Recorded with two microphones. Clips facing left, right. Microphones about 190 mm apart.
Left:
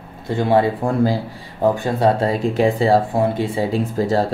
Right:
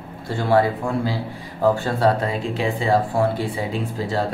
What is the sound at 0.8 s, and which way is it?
Speech, 45° left (ahead or behind).